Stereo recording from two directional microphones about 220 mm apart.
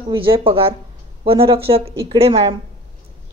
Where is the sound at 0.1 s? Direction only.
25° right (ahead or behind).